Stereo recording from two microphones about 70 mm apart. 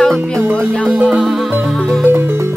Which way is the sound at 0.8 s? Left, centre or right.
Centre.